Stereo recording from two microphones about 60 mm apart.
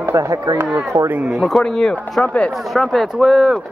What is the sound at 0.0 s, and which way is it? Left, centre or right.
Speech, right.